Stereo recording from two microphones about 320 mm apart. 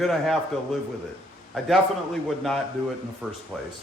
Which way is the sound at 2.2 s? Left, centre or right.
Centre.